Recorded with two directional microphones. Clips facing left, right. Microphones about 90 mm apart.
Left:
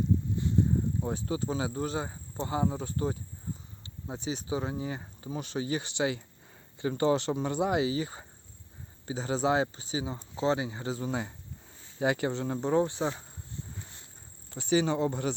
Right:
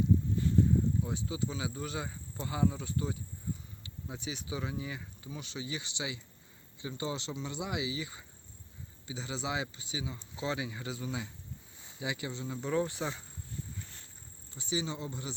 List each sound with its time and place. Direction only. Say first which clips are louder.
1.0 s speech: left 4 dB; 45° left (ahead or behind)
12.5 s speech: left 4 dB; 35° left (ahead or behind)
14.5 s speech: left 9 dB; 60° left (ahead or behind)